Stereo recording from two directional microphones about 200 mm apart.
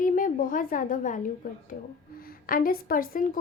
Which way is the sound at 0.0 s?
40° left (ahead or behind).